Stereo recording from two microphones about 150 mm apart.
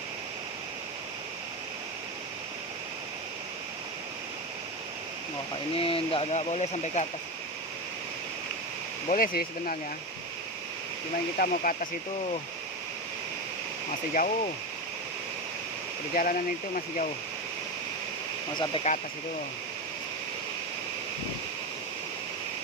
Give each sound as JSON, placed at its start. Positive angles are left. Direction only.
{"t": 5.7, "sound": "speech", "side_deg": 40}
{"t": 9.0, "sound": "speech", "side_deg": 70}
{"t": 11.3, "sound": "speech", "side_deg": 65}
{"t": 14.1, "sound": "speech", "side_deg": 60}
{"t": 16.1, "sound": "speech", "side_deg": 65}
{"t": 18.5, "sound": "speech", "side_deg": 30}